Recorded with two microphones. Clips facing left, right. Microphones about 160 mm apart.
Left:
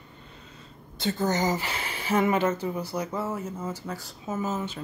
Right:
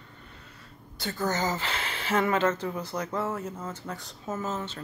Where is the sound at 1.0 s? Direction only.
20° left (ahead or behind).